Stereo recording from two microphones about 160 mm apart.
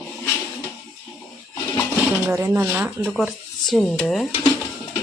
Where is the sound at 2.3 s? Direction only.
15° right (ahead or behind).